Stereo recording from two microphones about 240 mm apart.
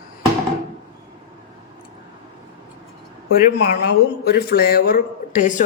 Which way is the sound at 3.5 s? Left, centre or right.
Left.